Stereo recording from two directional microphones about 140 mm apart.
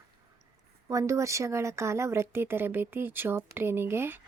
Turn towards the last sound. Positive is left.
turn(degrees=-15)  # may be behind; listen again after turning